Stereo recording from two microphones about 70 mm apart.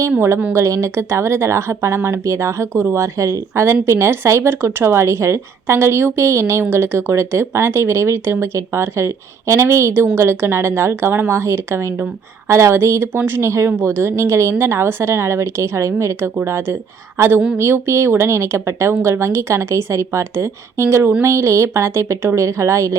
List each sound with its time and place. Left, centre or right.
0.5 s a woman's voice: right